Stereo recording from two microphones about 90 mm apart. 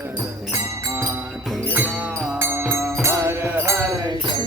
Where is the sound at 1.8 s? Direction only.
Centre (ahead or behind).